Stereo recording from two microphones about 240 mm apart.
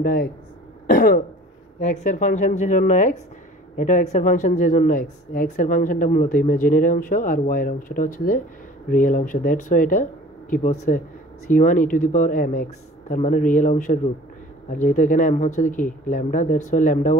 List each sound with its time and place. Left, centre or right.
0.0 s speech: left